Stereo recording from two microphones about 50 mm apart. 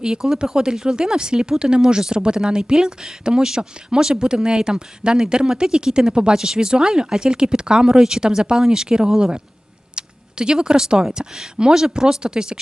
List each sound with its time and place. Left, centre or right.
0.0 s speech: centre
9.9 s a sound: centre
11.1 s speech: centre